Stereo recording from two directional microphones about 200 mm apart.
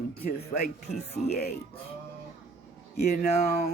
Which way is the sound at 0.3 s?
45° left (ahead or behind).